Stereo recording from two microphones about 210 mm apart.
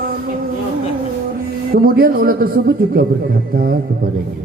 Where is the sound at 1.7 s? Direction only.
45° right (ahead or behind).